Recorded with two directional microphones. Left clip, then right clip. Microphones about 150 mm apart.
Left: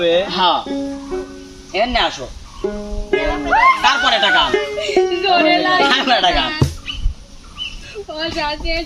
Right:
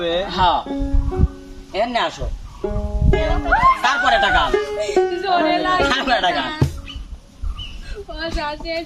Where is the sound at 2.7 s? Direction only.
30° right (ahead or behind).